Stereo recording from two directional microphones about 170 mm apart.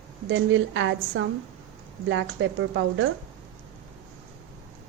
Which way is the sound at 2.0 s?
90° right.